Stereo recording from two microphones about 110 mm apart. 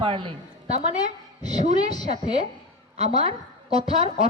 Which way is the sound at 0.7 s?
75° right (ahead or behind).